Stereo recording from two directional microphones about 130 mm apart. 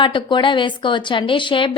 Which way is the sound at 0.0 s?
40° left (ahead or behind).